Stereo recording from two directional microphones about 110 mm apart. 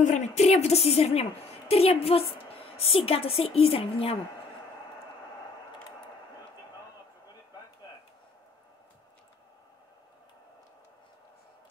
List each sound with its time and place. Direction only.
0.0 s a woman's voice: 90° left; by 4.2 s 60° left (ahead or behind)